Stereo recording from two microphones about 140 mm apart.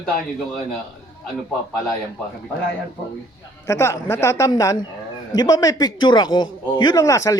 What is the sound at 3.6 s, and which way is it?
Speech, 20° left (ahead or behind).